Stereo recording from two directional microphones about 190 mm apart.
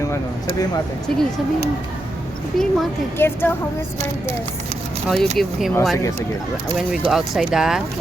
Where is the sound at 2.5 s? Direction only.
Centre (ahead or behind).